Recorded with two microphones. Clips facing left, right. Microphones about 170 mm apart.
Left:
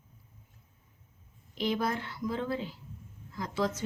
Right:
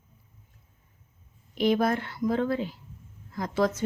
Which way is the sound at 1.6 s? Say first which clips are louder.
Right 7 dB; 60° right (ahead or behind).